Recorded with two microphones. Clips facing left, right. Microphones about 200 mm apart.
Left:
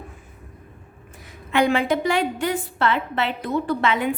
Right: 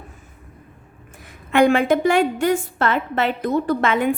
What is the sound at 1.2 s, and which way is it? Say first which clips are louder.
A woman's voice: right 5 dB; 50° right (ahead or behind).